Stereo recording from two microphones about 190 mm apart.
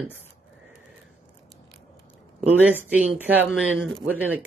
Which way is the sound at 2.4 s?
5° right (ahead or behind).